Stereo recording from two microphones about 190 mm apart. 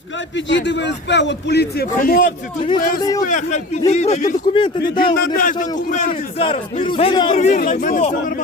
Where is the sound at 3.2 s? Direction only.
40° left (ahead or behind).